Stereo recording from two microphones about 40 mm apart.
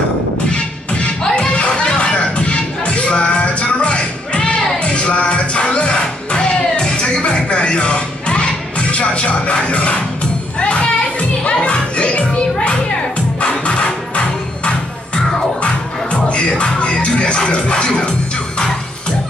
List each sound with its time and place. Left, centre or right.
0.5 s music: left